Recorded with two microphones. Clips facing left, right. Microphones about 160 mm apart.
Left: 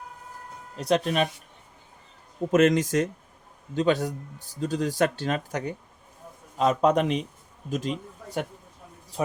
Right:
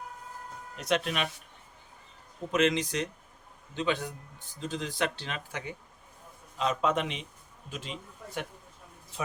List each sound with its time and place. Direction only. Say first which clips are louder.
0.8 s speech: left 6 dB; 35° left (ahead or behind)
2.5 s a man's voice: left 7 dB; 45° left (ahead or behind)